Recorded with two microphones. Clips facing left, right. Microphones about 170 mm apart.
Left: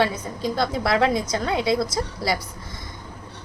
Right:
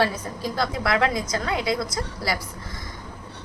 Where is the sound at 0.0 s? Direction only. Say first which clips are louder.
Left 1 dB; 20° left (ahead or behind).